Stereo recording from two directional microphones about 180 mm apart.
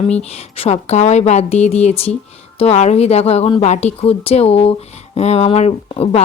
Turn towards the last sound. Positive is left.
turn(degrees=35)  # may be behind; listen again after turning